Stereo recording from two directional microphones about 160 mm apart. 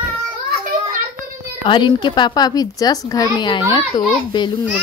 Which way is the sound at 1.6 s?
30° left (ahead or behind).